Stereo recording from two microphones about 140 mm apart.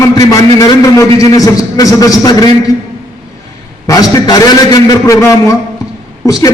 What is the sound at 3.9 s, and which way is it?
A man's voice, 25° left (ahead or behind).